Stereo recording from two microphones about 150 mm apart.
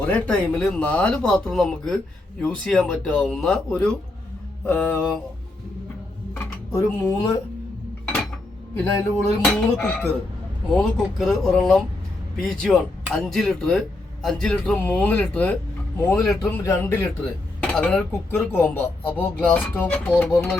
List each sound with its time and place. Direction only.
0.0 s a man's voice: 10° left (ahead or behind)
6.3 s a sound: 15° left (ahead or behind)
8.7 s a man's voice: 15° left (ahead or behind); by 16.4 s centre (ahead or behind)
16.5 s speech: 15° left (ahead or behind)